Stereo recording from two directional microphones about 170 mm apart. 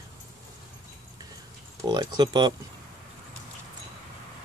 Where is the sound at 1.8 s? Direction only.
25° right (ahead or behind).